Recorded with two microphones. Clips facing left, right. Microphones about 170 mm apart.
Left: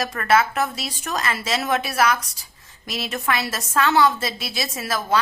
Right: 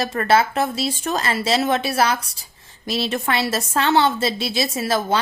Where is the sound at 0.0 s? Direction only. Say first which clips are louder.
Right 2 dB; 30° right (ahead or behind).